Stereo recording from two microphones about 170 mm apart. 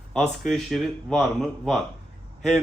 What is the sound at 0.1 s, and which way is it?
Speech, 5° left (ahead or behind).